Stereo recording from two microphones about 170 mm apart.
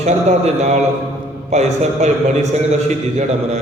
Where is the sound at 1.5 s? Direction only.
40° right (ahead or behind).